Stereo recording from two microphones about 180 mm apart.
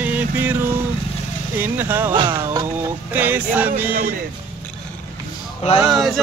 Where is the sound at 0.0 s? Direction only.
10° right (ahead or behind).